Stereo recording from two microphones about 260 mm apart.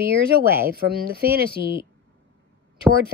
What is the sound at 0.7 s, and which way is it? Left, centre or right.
A woman's voice, right.